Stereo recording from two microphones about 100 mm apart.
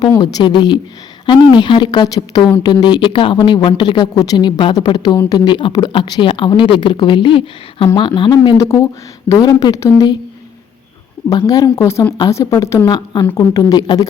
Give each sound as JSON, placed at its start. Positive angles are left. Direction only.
{"t": 0.2, "sound": "a woman's voice", "side_deg": 50}
{"t": 7.9, "sound": "speech", "side_deg": 50}
{"t": 8.5, "sound": "a woman's voice", "side_deg": 30}
{"t": 11.3, "sound": "a woman's voice", "side_deg": 40}
{"t": 11.8, "sound": "a woman's voice", "side_deg": 30}
{"t": 12.8, "sound": "speech", "side_deg": 45}
{"t": 13.3, "sound": "a woman's voice", "side_deg": 35}